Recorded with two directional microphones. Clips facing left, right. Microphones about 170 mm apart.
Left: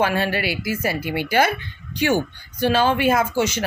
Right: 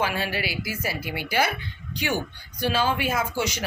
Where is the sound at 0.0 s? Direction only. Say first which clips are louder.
Left 6 dB; 60° left (ahead or behind).